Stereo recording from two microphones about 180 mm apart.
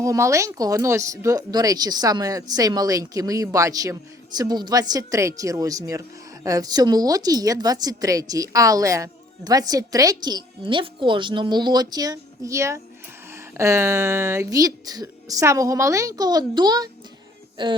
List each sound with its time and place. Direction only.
0.0 s a woman's voice: 15° right (ahead or behind)